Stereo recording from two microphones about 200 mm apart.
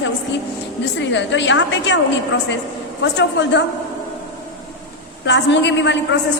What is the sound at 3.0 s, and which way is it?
Speech, 60° left (ahead or behind).